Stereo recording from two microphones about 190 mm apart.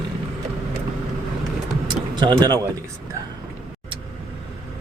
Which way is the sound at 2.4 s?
20° right (ahead or behind).